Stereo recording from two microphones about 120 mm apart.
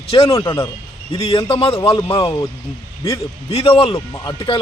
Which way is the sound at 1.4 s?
50° left (ahead or behind).